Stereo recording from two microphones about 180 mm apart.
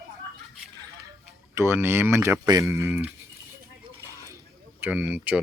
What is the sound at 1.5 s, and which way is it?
Speech, 15° right (ahead or behind).